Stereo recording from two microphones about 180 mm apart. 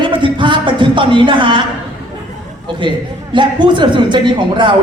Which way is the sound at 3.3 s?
25° right (ahead or behind).